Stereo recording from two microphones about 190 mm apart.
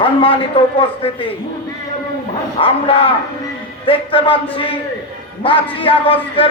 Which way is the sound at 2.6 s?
30° left (ahead or behind).